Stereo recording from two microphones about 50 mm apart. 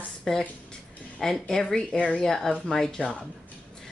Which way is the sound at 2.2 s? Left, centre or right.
Centre.